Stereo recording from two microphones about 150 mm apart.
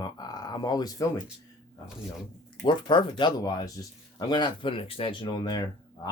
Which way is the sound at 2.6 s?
30° left (ahead or behind).